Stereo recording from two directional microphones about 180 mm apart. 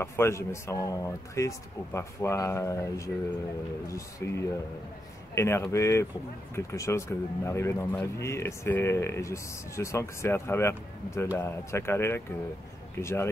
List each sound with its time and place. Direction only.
0.0 s speech: 15° left (ahead or behind)